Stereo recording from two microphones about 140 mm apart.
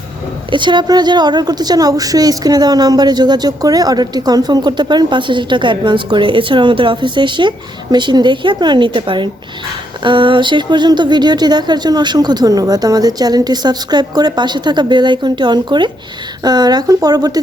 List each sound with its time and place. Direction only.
0.5 s a woman's voice: 35° right (ahead or behind)